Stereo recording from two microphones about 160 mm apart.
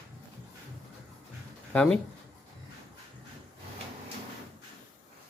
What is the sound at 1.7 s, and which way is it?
Speech, 5° left (ahead or behind).